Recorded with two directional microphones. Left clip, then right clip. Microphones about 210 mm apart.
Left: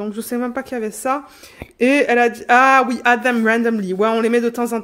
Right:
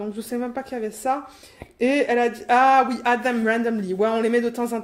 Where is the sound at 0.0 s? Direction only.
35° left (ahead or behind).